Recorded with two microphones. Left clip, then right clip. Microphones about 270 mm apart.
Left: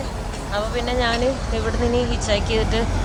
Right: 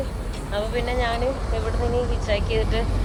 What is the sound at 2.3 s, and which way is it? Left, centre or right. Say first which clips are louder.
Speech: left 3 dB; centre.